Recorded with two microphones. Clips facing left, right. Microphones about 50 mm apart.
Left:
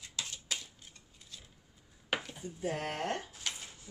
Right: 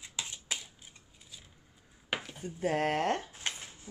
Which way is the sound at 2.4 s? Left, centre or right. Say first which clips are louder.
Right 6 dB; right.